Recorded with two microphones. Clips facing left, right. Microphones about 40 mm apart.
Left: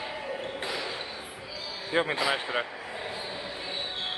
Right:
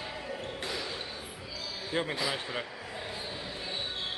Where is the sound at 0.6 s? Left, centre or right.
Centre.